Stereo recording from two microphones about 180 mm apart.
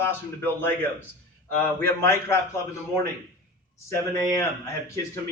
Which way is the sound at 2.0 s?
15° left (ahead or behind).